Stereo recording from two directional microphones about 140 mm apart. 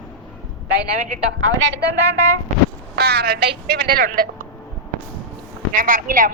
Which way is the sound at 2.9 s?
90° right.